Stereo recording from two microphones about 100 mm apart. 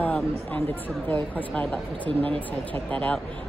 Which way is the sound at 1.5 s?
15° left (ahead or behind).